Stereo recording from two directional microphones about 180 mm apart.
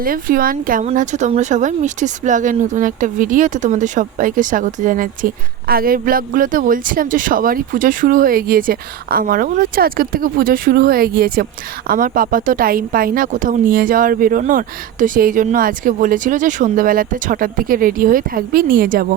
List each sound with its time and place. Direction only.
0.0 s a woman's voice: 50° right (ahead or behind)